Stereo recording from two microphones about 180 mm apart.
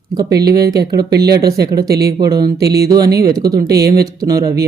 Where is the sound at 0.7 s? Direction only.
65° right (ahead or behind).